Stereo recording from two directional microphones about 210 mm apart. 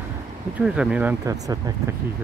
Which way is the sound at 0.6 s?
5° right (ahead or behind).